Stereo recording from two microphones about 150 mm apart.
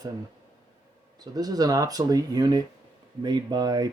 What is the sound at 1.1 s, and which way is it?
Speech, 25° right (ahead or behind).